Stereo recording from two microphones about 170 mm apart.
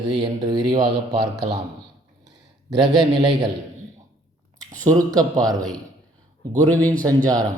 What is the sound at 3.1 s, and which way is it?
Speech, 25° right (ahead or behind).